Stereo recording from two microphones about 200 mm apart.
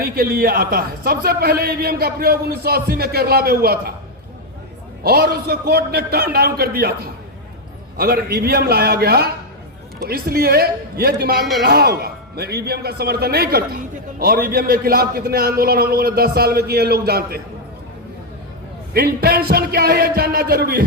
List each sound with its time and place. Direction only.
0.0 s speech: 50° right (ahead or behind)
5.0 s speech: 50° right (ahead or behind)
18.9 s speech: 50° right (ahead or behind)